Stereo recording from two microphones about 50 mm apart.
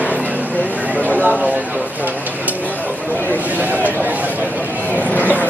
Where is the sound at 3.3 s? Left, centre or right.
Right.